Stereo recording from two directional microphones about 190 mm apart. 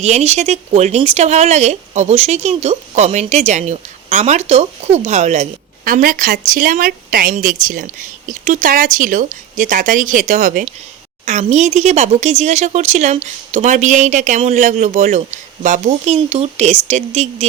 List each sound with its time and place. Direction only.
0.0 s speech: 35° right (ahead or behind)